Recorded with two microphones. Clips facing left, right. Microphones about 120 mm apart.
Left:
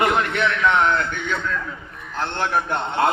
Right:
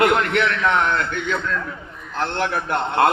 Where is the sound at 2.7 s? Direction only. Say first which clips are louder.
Right 6 dB; 65° right (ahead or behind).